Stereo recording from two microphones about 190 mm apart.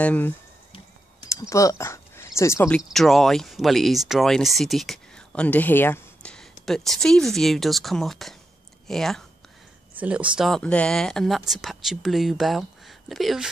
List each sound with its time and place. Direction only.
0.0 s speech: 10° left (ahead or behind)
1.3 s speech: 15° left (ahead or behind)
2.8 s speech: centre (ahead or behind)